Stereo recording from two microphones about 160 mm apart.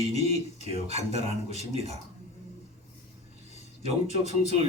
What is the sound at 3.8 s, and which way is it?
Speech, 40° right (ahead or behind).